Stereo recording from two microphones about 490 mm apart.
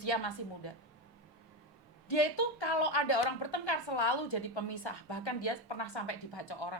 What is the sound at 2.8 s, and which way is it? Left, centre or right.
A woman's voice, left.